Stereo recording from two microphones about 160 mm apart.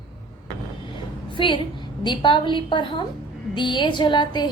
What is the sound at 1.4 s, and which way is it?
A woman's voice, 30° left (ahead or behind).